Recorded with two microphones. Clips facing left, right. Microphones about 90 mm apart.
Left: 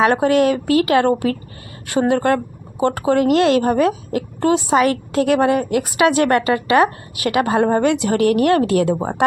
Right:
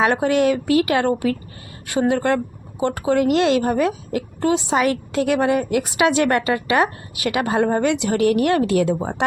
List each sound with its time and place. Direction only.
0.0 s a woman's voice: 40° left (ahead or behind)